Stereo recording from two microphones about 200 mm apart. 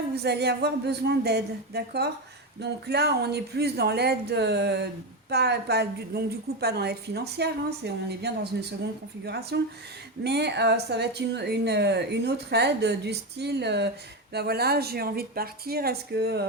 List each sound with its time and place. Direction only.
0.2 s a woman's voice: 55° right (ahead or behind)